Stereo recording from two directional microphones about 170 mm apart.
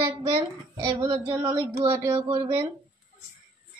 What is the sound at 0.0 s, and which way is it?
Speech, 15° right (ahead or behind).